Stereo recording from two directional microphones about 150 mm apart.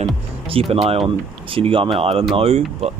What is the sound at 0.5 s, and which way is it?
Speech, 40° right (ahead or behind).